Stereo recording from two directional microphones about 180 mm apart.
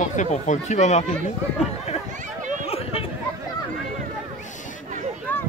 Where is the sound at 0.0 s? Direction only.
45° left (ahead or behind).